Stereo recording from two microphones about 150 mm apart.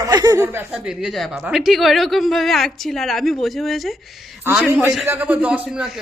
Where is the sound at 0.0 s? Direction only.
25° right (ahead or behind).